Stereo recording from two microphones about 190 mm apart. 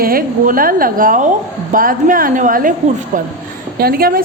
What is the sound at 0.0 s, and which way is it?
A woman's voice, 50° right (ahead or behind).